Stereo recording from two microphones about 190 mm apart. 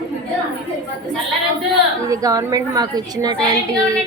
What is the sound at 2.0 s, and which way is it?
A woman's voice, 15° right (ahead or behind).